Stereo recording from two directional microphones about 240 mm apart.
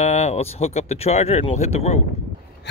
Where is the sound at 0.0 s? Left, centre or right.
Left.